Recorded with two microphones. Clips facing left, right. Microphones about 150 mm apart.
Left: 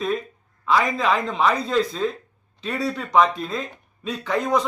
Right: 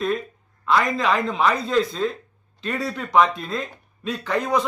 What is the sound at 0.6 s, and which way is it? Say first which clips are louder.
Speech: even; centre (ahead or behind).